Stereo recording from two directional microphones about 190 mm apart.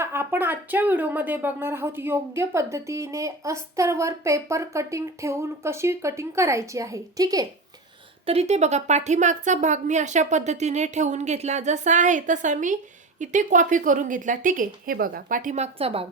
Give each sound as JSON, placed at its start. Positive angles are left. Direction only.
{"t": 0.0, "sound": "speech", "side_deg": -10}
{"t": 8.3, "sound": "a woman's voice", "side_deg": -35}